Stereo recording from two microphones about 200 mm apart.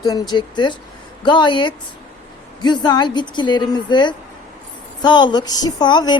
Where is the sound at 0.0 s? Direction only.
20° left (ahead or behind).